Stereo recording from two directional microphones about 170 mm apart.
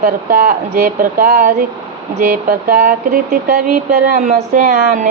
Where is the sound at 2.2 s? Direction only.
60° right (ahead or behind).